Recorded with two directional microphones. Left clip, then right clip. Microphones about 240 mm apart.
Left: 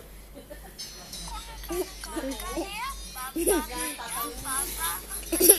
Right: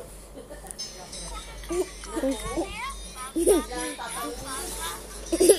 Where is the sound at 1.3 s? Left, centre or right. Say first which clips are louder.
Right 3 dB; left.